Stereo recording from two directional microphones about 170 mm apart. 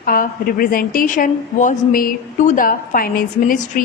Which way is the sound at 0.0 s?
60° left (ahead or behind).